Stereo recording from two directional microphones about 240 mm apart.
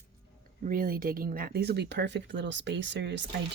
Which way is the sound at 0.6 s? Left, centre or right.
Right.